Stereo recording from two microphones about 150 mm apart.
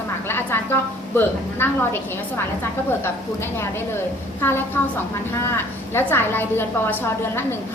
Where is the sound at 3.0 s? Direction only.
15° left (ahead or behind).